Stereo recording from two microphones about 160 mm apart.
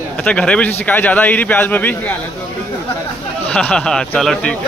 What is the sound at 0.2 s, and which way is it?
A man's voice, 5° left (ahead or behind).